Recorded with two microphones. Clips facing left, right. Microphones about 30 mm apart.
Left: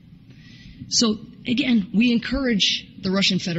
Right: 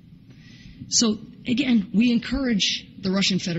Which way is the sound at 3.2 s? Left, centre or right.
Left.